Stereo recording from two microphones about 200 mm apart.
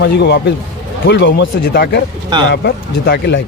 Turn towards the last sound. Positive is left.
turn(degrees=60)  # may be behind; listen again after turning